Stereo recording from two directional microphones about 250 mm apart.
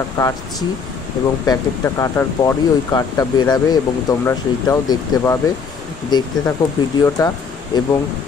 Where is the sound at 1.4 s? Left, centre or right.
Centre.